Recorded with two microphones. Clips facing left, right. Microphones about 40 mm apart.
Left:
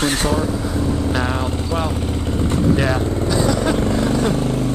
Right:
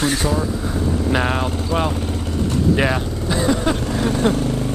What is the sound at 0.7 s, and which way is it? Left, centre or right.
Vehicle, right.